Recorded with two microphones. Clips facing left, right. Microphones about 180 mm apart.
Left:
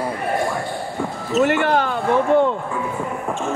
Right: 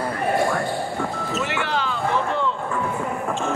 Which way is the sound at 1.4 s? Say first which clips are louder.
Left 10 dB; 50° left (ahead or behind).